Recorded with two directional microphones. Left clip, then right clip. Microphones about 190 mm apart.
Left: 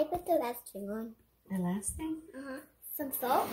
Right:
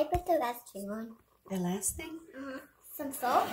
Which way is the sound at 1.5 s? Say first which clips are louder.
Right 3 dB; 45° right (ahead or behind).